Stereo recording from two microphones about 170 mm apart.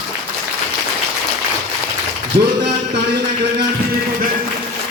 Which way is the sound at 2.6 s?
85° right.